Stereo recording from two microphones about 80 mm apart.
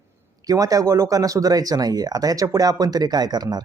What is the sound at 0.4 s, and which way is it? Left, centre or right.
Speech, right.